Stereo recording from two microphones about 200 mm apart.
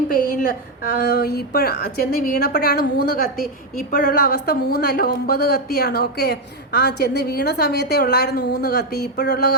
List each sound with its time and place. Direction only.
0.9 s speech: 55° left (ahead or behind)